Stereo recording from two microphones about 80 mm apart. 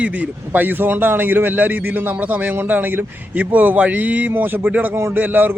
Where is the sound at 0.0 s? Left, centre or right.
Centre.